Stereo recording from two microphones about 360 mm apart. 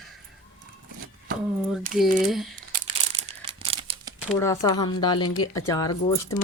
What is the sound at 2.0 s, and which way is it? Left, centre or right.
Speech, centre.